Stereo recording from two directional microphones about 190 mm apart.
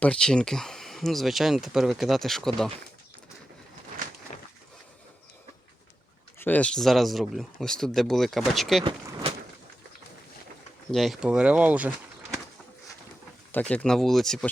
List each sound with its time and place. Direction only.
0.0 s speech: 5° left (ahead or behind)
6.4 s speech: 5° left (ahead or behind)
8.8 s a sound: 25° right (ahead or behind)
10.9 s speech: centre (ahead or behind)
13.5 s speech: 5° left (ahead or behind)